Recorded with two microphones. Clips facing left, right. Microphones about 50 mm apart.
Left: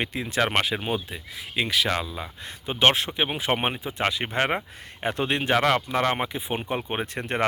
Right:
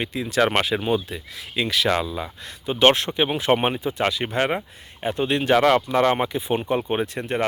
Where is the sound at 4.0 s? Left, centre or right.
Left.